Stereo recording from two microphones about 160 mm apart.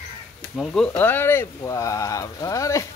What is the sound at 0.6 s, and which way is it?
Speech, 5° left (ahead or behind).